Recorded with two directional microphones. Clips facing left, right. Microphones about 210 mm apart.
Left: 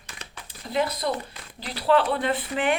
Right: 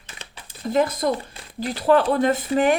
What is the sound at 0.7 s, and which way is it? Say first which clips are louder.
Speech: right 5 dB; 45° right (ahead or behind).